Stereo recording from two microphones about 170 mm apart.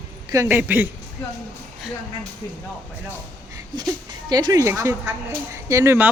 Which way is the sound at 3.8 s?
25° right (ahead or behind).